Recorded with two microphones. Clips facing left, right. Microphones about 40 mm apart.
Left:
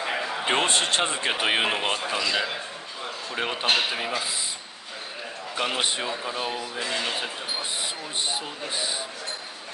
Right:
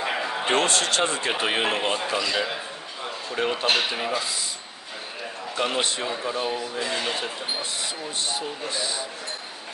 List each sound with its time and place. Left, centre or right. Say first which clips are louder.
0.0 s a sound: right 1 dB; centre
0.6 s speech: right 1 dB; left
2.0 s a sound: right 1 dB; centre
3.9 s speech: right 2 dB; centre
5.6 s speech: right 1 dB; centre
8.3 s speech: right 1 dB; centre